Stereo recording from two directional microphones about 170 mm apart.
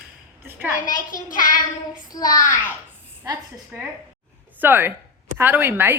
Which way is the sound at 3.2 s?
20° right (ahead or behind).